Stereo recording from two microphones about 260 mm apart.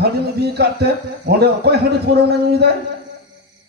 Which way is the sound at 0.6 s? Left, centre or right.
Right.